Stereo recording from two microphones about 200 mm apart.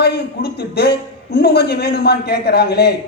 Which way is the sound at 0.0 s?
55° left (ahead or behind).